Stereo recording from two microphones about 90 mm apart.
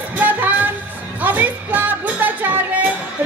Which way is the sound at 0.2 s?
20° right (ahead or behind).